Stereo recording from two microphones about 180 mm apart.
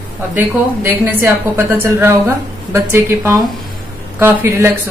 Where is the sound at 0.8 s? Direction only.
10° right (ahead or behind).